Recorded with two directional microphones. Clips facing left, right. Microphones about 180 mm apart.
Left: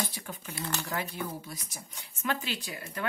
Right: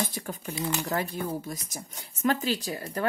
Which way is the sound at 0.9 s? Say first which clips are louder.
Right 5 dB; 45° right (ahead or behind).